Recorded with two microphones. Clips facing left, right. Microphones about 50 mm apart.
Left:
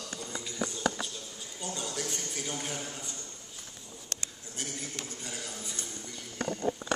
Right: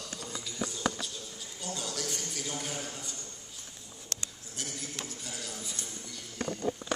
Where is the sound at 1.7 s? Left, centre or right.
Centre.